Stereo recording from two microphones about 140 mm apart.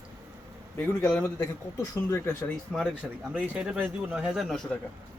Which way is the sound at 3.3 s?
5° right (ahead or behind).